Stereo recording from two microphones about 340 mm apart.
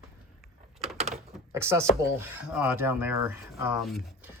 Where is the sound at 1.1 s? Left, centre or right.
Centre.